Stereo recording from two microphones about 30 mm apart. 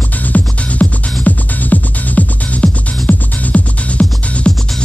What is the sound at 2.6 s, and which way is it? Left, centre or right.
Music, left.